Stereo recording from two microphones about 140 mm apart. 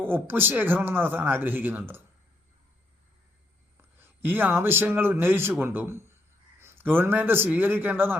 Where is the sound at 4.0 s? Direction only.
15° right (ahead or behind).